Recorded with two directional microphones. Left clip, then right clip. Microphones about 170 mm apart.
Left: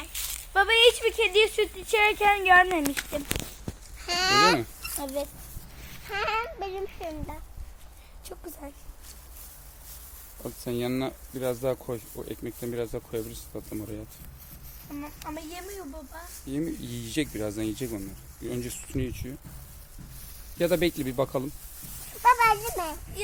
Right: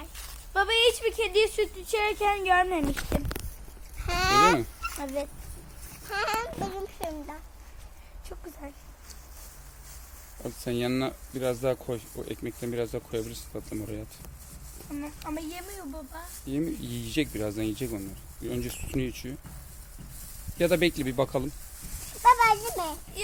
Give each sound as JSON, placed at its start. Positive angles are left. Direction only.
{"t": 0.5, "sound": "speech", "side_deg": 40}
{"t": 4.0, "sound": "speech", "side_deg": 10}
{"t": 4.9, "sound": "speech", "side_deg": 65}
{"t": 6.1, "sound": "speech", "side_deg": 25}
{"t": 8.3, "sound": "speech", "side_deg": 75}
{"t": 10.4, "sound": "speech", "side_deg": -5}
{"t": 14.9, "sound": "speech", "side_deg": 45}
{"t": 16.5, "sound": "speech", "side_deg": 0}
{"t": 20.6, "sound": "speech", "side_deg": -10}
{"t": 22.2, "sound": "children playing", "side_deg": 25}
{"t": 23.2, "sound": "speech", "side_deg": 50}